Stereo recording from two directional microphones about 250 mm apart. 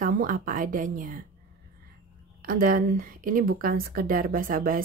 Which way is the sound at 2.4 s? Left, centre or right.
Right.